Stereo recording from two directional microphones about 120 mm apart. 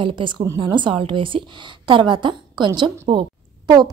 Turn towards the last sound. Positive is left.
turn(degrees=-35)  # may be behind; listen again after turning